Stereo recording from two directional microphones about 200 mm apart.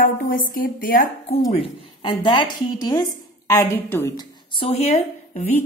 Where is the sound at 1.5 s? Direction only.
25° left (ahead or behind).